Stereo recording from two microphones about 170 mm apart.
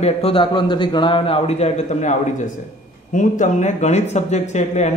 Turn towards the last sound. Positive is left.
turn(degrees=45)  # may be behind; listen again after turning